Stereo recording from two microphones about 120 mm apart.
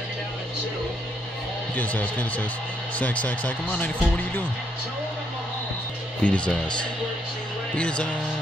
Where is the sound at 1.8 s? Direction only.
15° left (ahead or behind).